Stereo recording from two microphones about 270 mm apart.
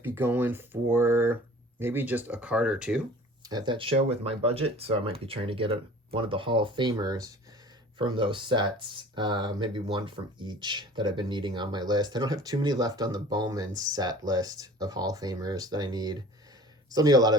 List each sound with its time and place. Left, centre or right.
0.0 s speech: centre
3.4 s speech: centre